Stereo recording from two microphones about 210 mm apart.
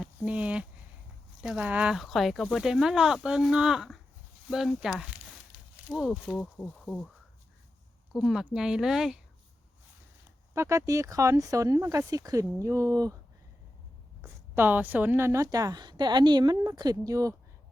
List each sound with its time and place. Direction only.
0.0 s a sound: 5° right (ahead or behind)
1.4 s speech: 5° right (ahead or behind)
8.1 s speech: centre (ahead or behind)
10.5 s a woman's voice: 15° right (ahead or behind)
14.2 s a woman's voice: 10° right (ahead or behind)